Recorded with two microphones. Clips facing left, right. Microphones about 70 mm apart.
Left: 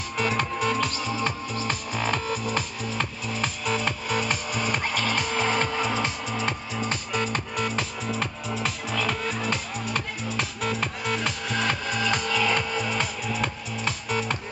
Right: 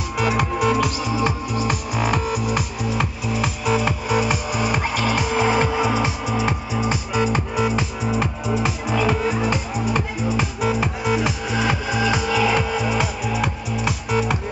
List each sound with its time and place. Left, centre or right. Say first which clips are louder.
0.2 s music: right 5 dB; centre